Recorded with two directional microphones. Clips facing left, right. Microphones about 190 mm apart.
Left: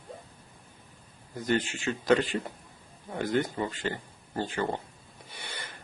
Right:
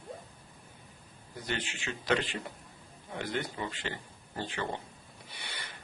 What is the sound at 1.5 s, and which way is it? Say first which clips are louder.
A man's voice: left 9 dB; 45° left (ahead or behind).